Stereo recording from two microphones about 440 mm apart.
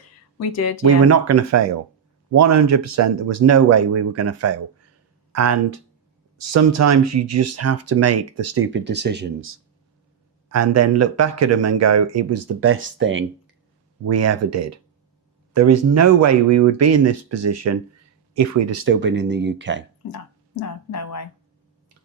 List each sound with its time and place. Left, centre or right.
1.0 s speech: right
20.6 s speech: left